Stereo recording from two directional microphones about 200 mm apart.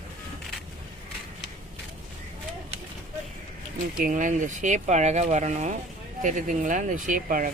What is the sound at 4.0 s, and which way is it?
Speech, 40° right (ahead or behind).